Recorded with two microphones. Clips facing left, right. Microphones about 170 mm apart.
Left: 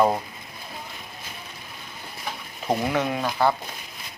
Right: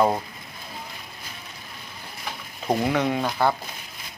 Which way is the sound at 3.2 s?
Centre (ahead or behind).